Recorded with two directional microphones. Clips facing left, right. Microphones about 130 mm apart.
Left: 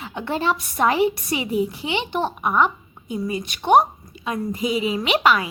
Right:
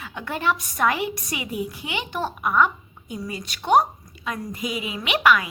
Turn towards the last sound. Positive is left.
turn(degrees=30)  # may be behind; listen again after turning